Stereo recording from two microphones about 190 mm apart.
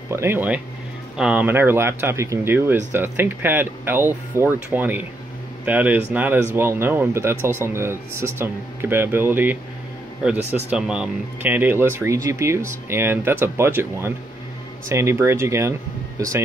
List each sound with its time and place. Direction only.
0.1 s speech: 15° right (ahead or behind)